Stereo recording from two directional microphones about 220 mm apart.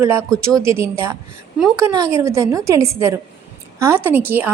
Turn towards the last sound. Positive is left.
turn(degrees=-10)  # may be behind; listen again after turning